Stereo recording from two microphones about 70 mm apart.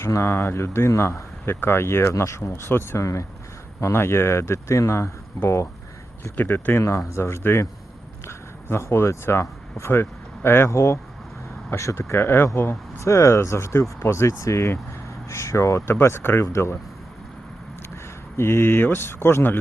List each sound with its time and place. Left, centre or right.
0.0 s speech: left
6.3 s speech: left
6.8 s speech: left
18.3 s speech: left